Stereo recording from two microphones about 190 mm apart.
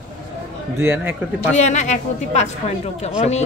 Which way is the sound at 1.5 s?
40° left (ahead or behind).